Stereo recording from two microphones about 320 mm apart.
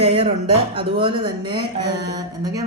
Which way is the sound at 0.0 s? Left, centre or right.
Centre.